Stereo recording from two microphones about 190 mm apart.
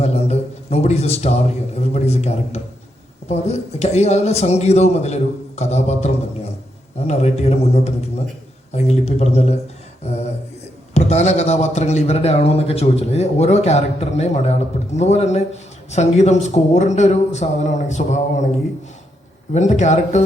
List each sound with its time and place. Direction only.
0.0 s a man's voice: 35° left (ahead or behind)
19.5 s a man's voice: 40° left (ahead or behind)